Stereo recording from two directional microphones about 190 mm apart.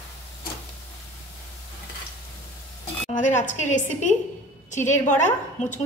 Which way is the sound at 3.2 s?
40° left (ahead or behind).